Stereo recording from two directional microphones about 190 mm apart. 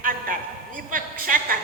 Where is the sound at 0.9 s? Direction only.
45° right (ahead or behind).